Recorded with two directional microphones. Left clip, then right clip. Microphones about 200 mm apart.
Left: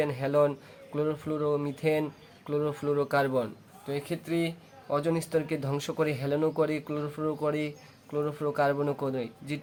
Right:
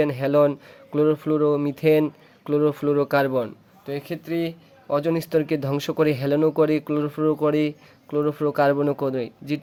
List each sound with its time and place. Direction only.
0.0 s speech: 40° right (ahead or behind)